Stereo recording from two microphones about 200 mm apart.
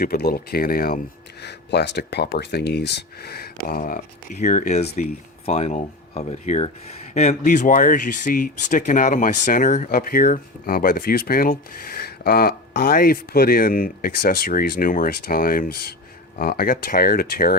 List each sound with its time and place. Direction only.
0.0 s speech: 50° left (ahead or behind)